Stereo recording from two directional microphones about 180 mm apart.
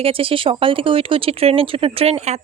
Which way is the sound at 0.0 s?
30° right (ahead or behind).